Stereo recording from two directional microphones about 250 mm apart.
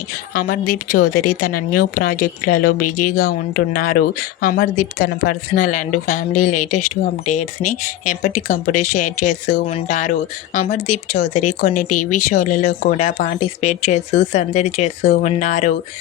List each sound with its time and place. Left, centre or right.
0.3 s speech: left